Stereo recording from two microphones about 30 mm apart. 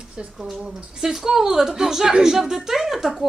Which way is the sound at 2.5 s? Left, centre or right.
Centre.